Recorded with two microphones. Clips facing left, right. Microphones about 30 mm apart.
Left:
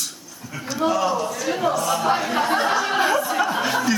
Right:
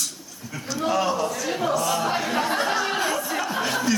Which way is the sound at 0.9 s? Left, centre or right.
Centre.